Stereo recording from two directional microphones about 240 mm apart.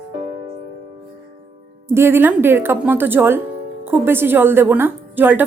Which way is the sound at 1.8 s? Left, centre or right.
Centre.